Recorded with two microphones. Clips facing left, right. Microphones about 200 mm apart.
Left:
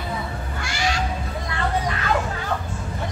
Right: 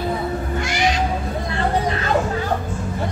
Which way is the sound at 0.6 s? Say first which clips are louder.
Right 4 dB; 20° right (ahead or behind).